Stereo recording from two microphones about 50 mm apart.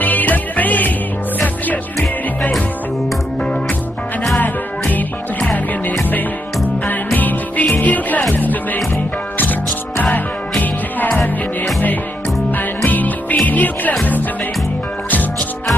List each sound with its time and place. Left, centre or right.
0.0 s music: left
4.4 s music: left
7.2 s music: left
12.4 s music: left